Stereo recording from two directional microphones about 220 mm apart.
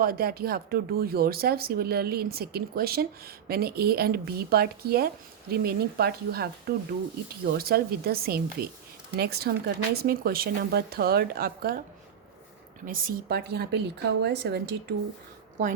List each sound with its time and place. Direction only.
0.0 s speech: 45° right (ahead or behind)
12.8 s speech: 40° right (ahead or behind)